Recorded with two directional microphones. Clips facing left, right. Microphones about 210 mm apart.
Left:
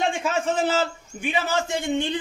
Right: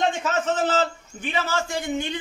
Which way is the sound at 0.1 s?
10° left (ahead or behind).